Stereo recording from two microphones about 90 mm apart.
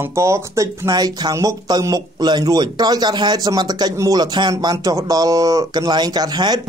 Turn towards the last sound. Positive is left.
turn(degrees=-50)  # may be behind; listen again after turning